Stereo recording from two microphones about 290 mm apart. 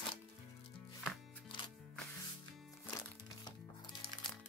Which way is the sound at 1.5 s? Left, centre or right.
Centre.